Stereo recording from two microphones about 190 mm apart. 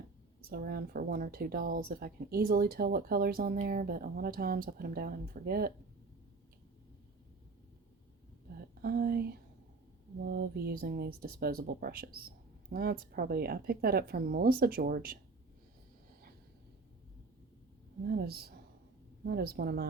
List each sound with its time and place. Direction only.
0.4 s speech: 55° right (ahead or behind)
8.5 s speech: 50° right (ahead or behind)
18.0 s a woman's voice: 55° right (ahead or behind)